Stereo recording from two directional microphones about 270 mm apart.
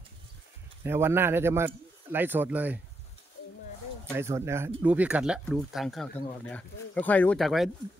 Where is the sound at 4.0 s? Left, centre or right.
Centre.